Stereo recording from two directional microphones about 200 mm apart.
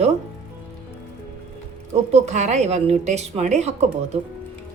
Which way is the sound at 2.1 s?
35° right (ahead or behind).